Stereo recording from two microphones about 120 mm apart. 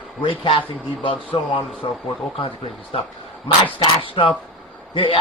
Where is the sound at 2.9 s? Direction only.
55° left (ahead or behind).